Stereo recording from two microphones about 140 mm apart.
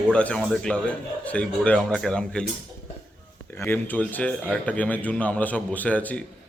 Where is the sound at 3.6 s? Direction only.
15° left (ahead or behind).